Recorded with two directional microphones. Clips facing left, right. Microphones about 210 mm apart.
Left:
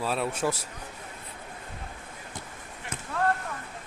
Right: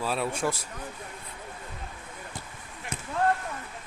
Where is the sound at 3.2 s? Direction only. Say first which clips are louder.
Right 1 dB; 20° right (ahead or behind).